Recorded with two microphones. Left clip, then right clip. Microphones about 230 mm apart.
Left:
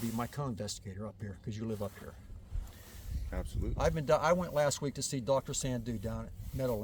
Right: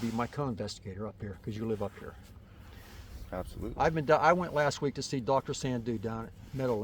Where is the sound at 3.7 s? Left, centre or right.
Left.